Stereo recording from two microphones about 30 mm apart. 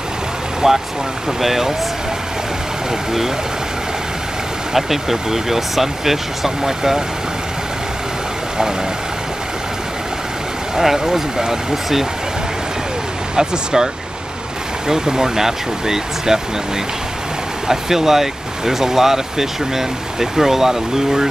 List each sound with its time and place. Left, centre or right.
0.6 s speech: centre
4.7 s speech: centre
10.8 s speech: centre
13.4 s speech: right
14.9 s speech: centre
17.6 s speech: centre